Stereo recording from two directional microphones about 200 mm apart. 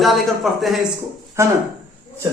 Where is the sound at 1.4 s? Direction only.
15° right (ahead or behind).